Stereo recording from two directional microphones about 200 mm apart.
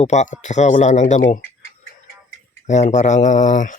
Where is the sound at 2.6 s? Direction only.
35° left (ahead or behind).